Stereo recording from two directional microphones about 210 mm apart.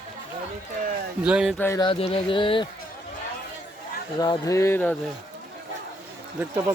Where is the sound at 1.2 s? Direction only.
5° right (ahead or behind).